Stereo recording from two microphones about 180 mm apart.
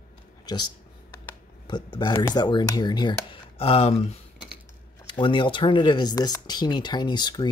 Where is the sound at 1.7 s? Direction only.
25° left (ahead or behind).